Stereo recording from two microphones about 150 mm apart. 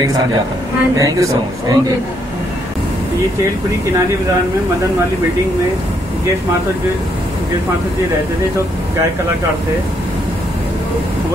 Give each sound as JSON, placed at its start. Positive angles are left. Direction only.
{"t": 0.9, "sound": "speech", "side_deg": -20}